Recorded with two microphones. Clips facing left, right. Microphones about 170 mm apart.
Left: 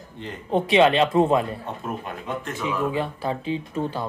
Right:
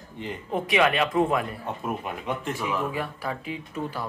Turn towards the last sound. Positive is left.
turn(degrees=30)  # may be behind; listen again after turning